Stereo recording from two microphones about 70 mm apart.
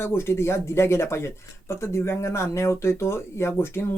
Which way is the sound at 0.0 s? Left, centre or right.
Left.